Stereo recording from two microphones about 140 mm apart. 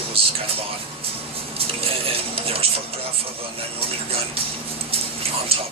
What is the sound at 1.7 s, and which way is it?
Speech, 40° right (ahead or behind).